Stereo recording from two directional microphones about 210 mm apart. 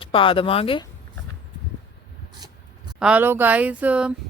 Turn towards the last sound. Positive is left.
turn(degrees=-5)  # may be behind; listen again after turning